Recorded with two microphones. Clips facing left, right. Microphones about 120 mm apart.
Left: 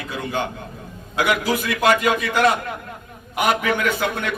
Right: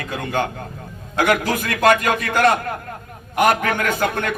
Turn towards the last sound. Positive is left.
turn(degrees=-45)  # may be behind; listen again after turning